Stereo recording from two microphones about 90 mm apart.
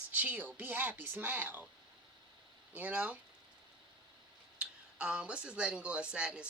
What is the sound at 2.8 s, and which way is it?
Speech, 15° right (ahead or behind).